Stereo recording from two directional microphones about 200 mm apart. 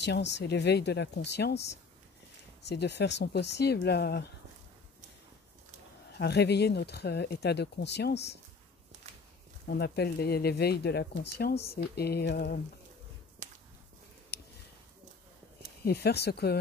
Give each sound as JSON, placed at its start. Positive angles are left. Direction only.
{"t": 0.0, "sound": "speech", "side_deg": 60}
{"t": 2.6, "sound": "speech", "side_deg": 55}
{"t": 6.1, "sound": "speech", "side_deg": 55}
{"t": 9.7, "sound": "speech", "side_deg": 55}
{"t": 13.4, "sound": "whip", "side_deg": -35}
{"t": 14.3, "sound": "a sound", "side_deg": 55}
{"t": 15.8, "sound": "speech", "side_deg": 55}